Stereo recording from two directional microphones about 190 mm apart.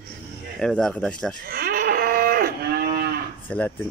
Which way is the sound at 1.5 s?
50° right (ahead or behind).